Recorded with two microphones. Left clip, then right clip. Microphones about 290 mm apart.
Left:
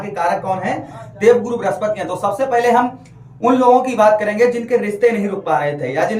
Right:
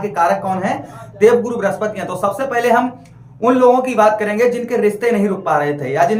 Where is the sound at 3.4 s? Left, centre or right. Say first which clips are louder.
Even; centre.